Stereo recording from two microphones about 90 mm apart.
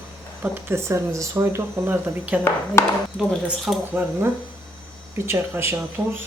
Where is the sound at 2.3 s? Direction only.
20° right (ahead or behind).